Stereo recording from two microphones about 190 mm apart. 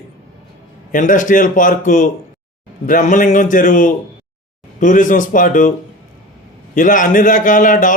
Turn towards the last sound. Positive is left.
turn(degrees=45)  # may be behind; listen again after turning